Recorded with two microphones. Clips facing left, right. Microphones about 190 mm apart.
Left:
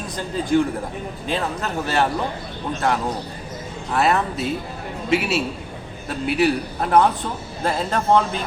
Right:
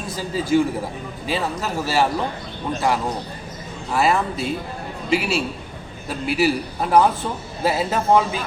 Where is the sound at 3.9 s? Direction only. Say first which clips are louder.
Even; centre (ahead or behind).